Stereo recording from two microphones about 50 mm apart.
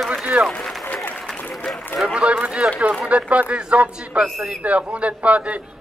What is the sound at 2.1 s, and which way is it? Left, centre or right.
A man's voice, right.